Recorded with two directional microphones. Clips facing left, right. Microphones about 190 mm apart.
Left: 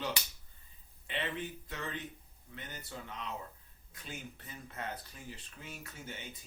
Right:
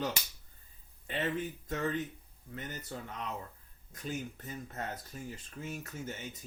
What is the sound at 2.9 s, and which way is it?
Speech, 40° right (ahead or behind).